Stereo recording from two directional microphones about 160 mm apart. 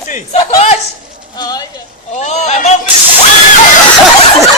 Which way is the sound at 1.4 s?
25° left (ahead or behind).